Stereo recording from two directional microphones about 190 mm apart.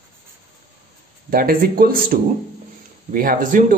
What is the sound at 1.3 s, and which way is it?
Speech, 50° right (ahead or behind).